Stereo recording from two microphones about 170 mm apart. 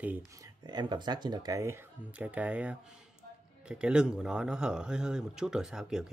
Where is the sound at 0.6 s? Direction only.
25° right (ahead or behind).